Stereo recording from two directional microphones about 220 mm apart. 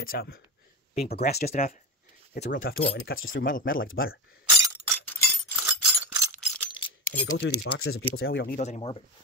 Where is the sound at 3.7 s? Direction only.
65° left (ahead or behind).